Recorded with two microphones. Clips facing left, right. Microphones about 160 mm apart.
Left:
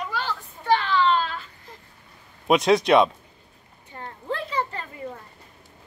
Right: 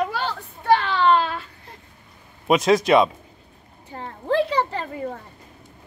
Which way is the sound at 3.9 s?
90° right.